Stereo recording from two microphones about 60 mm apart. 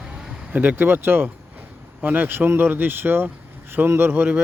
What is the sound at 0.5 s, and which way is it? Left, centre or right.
Speech, right.